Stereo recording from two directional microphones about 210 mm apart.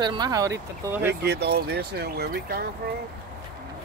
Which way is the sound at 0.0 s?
20° right (ahead or behind).